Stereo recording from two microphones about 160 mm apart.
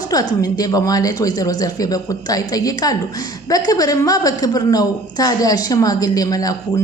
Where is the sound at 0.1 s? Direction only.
25° left (ahead or behind).